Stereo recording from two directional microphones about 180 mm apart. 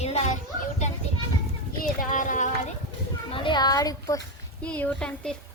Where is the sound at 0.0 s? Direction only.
35° left (ahead or behind).